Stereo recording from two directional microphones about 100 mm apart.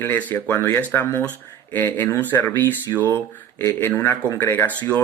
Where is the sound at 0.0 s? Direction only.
20° left (ahead or behind).